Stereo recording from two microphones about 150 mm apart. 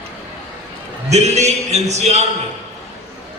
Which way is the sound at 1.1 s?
45° right (ahead or behind).